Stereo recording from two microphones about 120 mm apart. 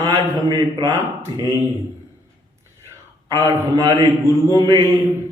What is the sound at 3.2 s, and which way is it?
A man's voice, 30° right (ahead or behind).